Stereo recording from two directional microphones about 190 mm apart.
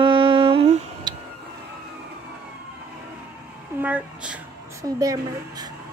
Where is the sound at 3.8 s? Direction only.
5° right (ahead or behind).